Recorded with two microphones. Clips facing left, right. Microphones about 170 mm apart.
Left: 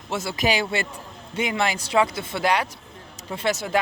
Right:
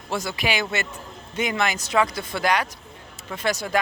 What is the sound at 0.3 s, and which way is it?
A man's voice, 40° left (ahead or behind).